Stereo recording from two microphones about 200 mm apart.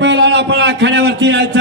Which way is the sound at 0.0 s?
60° right (ahead or behind).